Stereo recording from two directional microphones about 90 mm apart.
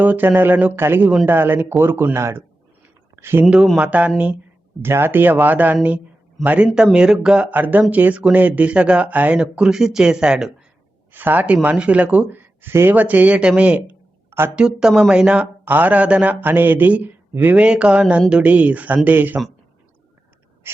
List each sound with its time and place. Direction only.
0.0 s a man's voice: 20° right (ahead or behind)
3.8 s speech: 15° right (ahead or behind)
4.8 s speech: 25° right (ahead or behind); by 10.5 s 10° right (ahead or behind)
11.1 s speech: 20° right (ahead or behind)
14.3 s a sound: 25° right (ahead or behind)
14.5 s speech: 10° right (ahead or behind)
15.6 s speech: 20° right (ahead or behind)
20.7 s a sound: 25° right (ahead or behind)